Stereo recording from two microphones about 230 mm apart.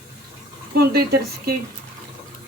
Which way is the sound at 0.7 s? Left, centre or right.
Right.